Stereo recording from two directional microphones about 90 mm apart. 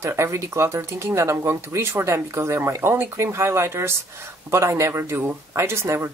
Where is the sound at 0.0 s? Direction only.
35° right (ahead or behind).